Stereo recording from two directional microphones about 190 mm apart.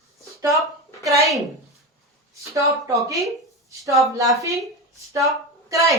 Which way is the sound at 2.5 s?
15° right (ahead or behind).